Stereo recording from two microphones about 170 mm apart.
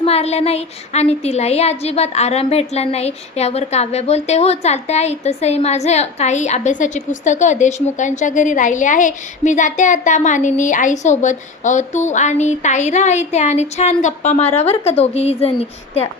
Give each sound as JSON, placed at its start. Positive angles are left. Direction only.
{"t": 0.0, "sound": "a woman's voice", "side_deg": 35}